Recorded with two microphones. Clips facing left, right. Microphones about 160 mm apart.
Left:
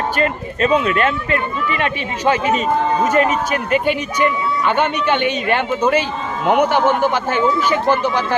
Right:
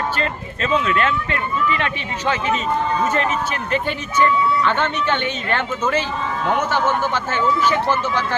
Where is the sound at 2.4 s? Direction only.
45° left (ahead or behind).